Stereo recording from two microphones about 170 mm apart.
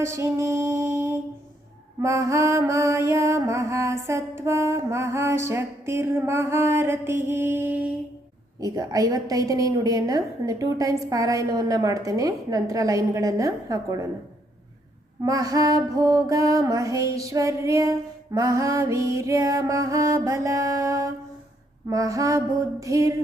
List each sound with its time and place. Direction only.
0.0 s music: 15° right (ahead or behind)
8.6 s music: 20° right (ahead or behind)
15.2 s music: 20° right (ahead or behind)